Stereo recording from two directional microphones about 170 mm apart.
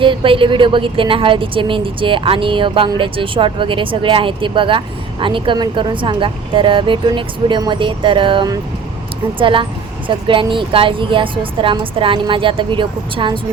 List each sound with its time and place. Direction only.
0.0 s a woman's voice: 30° right (ahead or behind)